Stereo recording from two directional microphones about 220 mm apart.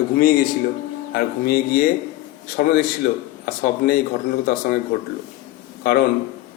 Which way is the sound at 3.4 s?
45° left (ahead or behind).